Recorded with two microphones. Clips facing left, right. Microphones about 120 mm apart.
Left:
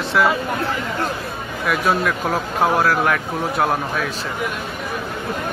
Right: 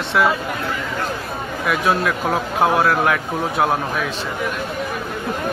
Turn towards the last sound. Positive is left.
turn(degrees=0)  # may be behind; listen again after turning